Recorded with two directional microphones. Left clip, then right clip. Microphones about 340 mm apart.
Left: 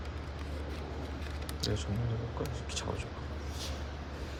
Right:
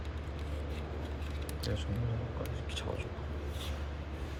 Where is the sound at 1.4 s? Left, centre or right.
Centre.